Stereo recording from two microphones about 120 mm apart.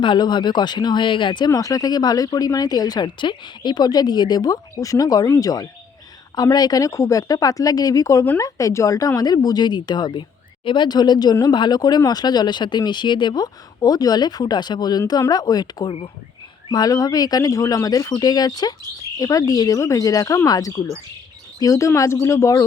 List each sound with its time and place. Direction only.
0.0 s speech: 40° left (ahead or behind)
1.5 s speech: 30° left (ahead or behind)